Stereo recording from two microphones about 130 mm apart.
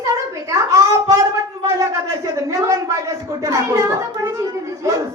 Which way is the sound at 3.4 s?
25° right (ahead or behind).